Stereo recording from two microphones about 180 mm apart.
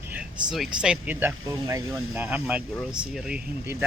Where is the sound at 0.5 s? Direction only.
5° right (ahead or behind).